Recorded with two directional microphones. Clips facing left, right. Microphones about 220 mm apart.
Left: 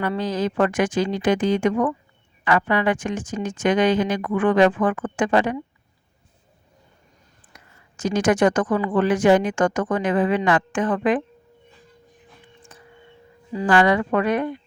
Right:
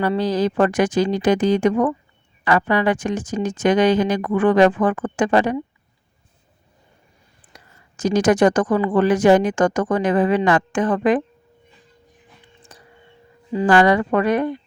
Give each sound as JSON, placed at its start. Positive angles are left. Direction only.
{"t": 0.0, "sound": "speech", "side_deg": -35}
{"t": 7.5, "sound": "speech", "side_deg": -40}
{"t": 12.7, "sound": "tuning fork", "side_deg": -35}
{"t": 13.7, "sound": "speech", "side_deg": -40}